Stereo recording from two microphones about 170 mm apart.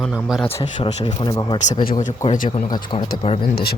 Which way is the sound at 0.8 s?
30° left (ahead or behind).